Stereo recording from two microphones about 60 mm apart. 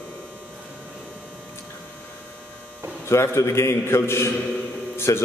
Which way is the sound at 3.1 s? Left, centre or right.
Left.